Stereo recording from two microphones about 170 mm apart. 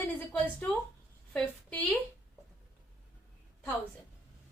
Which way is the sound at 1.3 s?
5° left (ahead or behind).